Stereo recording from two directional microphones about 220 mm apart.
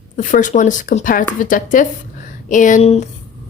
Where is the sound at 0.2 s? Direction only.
35° left (ahead or behind).